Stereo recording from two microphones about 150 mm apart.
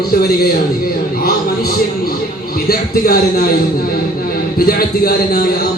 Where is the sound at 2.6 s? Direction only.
90° left.